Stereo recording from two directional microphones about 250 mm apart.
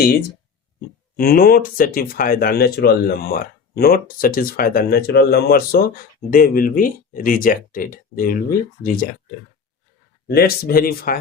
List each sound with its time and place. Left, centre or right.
1.1 s speech: left
10.2 s speech: left